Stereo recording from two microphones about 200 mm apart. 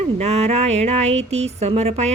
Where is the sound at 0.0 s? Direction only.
30° right (ahead or behind).